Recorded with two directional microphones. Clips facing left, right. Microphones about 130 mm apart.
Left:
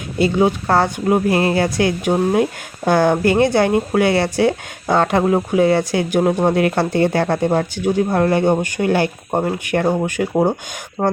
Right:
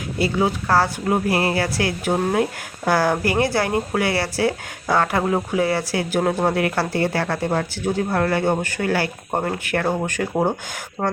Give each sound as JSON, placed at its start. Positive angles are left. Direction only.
{"t": 0.2, "sound": "speech", "side_deg": 20}